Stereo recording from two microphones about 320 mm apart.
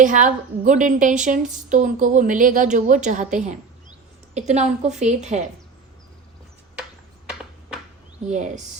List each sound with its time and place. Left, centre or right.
0.0 s a woman's voice: right
8.3 s a woman's voice: right